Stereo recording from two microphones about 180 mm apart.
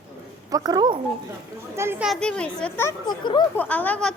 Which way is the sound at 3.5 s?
10° left (ahead or behind).